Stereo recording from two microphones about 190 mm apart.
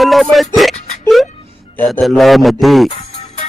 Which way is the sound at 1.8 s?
Centre (ahead or behind).